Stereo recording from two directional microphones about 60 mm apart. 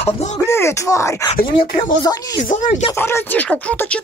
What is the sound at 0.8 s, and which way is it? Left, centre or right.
Speech, left.